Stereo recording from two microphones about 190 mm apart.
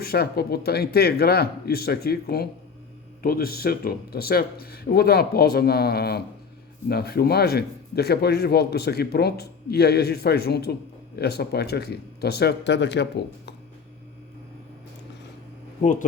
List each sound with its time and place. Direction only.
0.0 s speech: 55° left (ahead or behind)
15.8 s speech: 40° left (ahead or behind)